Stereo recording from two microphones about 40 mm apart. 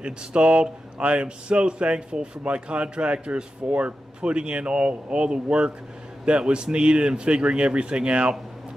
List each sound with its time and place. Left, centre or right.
0.0 s speech: right
4.2 s speech: right